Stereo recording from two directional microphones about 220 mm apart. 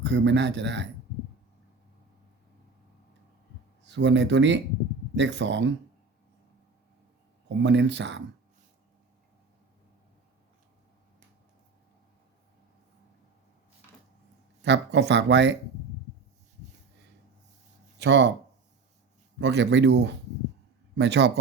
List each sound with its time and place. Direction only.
0.0 s speech: 55° right (ahead or behind)
3.8 s speech: 55° right (ahead or behind)
7.4 s speech: 55° right (ahead or behind)
14.6 s speech: 50° right (ahead or behind)
17.9 s speech: 50° right (ahead or behind)
19.4 s speech: 55° right (ahead or behind)